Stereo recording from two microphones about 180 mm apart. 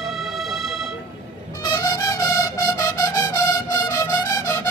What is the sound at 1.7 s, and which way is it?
Music, 20° left (ahead or behind).